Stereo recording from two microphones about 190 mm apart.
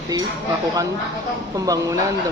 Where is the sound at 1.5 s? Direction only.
20° right (ahead or behind).